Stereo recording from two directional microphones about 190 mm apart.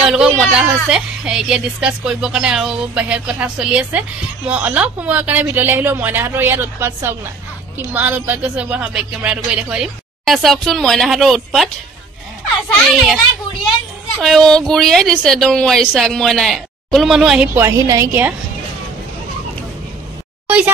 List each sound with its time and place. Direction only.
0.1 s a sound: 5° right (ahead or behind)
0.8 s a woman's voice: 5° right (ahead or behind)
12.7 s a woman's voice: centre (ahead or behind)
14.2 s a woman's voice: centre (ahead or behind); by 18.3 s 15° right (ahead or behind)
20.4 s plop: 10° right (ahead or behind)